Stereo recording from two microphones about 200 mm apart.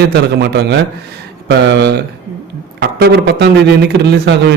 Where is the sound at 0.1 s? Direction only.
55° right (ahead or behind).